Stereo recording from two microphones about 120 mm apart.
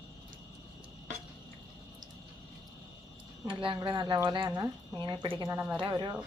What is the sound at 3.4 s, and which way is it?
A woman's voice, 45° right (ahead or behind).